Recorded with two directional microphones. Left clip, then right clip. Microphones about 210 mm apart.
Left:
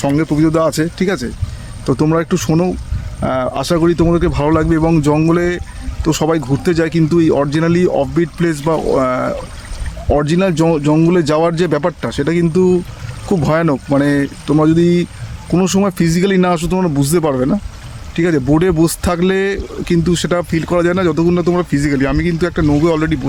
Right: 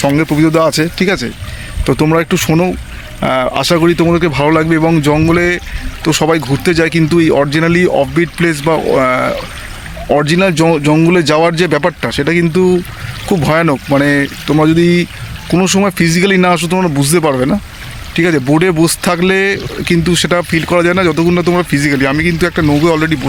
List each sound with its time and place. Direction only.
0.0 s speech: 20° right (ahead or behind)